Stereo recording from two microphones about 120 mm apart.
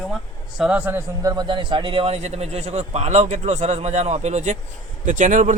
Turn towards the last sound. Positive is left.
turn(degrees=-90)